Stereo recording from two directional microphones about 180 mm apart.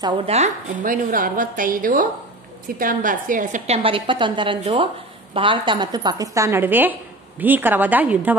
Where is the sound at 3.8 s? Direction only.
30° right (ahead or behind).